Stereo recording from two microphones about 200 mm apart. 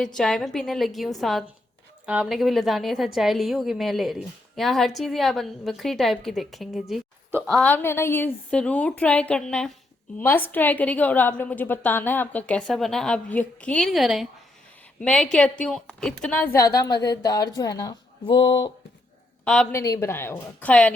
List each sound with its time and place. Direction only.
0.0 s a woman's voice: 5° left (ahead or behind); by 18.7 s 25° left (ahead or behind)
19.5 s a woman's voice: 5° left (ahead or behind)
19.8 s a woman's voice: 15° left (ahead or behind)